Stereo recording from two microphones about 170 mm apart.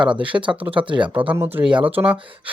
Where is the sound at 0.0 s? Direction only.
30° right (ahead or behind).